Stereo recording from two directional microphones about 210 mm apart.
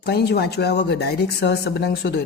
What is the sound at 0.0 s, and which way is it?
Speech, 50° left (ahead or behind).